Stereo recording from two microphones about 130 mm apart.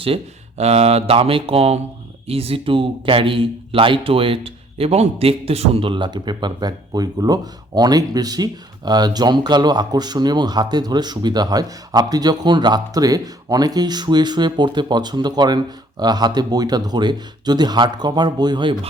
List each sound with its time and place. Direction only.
0.0 s speech: 50° right (ahead or behind)